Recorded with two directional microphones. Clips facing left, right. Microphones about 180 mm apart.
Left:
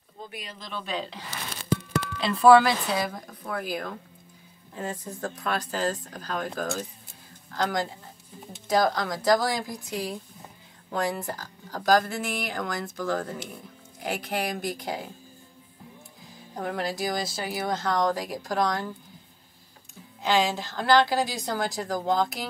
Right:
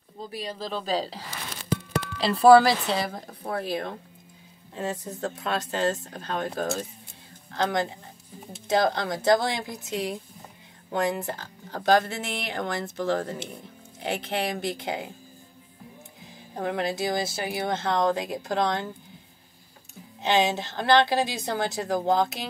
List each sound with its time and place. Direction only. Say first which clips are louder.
0.3 s speech: right 8 dB; 35° right (ahead or behind)
16.5 s speech: right 2 dB; 25° right (ahead or behind)
20.2 s speech: right 1 dB; 20° right (ahead or behind)